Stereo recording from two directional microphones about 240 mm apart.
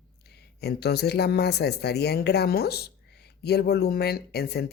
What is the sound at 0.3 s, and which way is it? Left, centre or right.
Speech, left.